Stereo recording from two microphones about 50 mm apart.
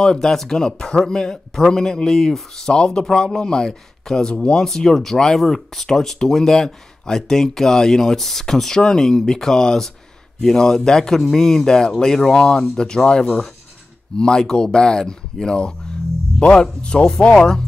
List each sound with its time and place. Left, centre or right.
0.0 s speech: centre